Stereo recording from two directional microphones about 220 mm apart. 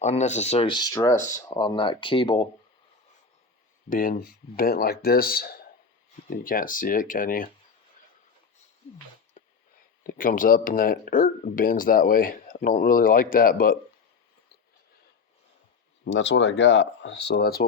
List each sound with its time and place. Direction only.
0.0 s speech: 30° left (ahead or behind)
3.8 s speech: 40° left (ahead or behind)
9.4 s a sound: 35° left (ahead or behind)
10.2 s speech: 40° left (ahead or behind)
16.1 s speech: 55° left (ahead or behind)